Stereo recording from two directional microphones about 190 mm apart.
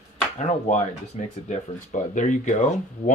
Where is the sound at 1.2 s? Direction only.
35° left (ahead or behind).